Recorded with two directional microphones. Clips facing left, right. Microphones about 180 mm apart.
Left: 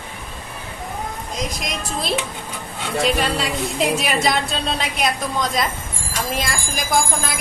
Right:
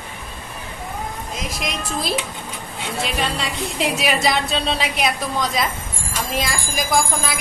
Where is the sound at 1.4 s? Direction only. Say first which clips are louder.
Left 1 dB; centre (ahead or behind).